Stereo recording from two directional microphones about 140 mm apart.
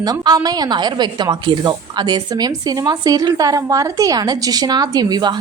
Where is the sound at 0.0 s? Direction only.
30° right (ahead or behind).